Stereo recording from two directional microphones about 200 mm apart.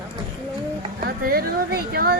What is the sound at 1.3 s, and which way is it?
Speech, 45° right (ahead or behind).